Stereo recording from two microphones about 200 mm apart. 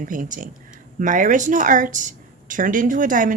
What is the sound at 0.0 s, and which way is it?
A woman's voice, 40° right (ahead or behind).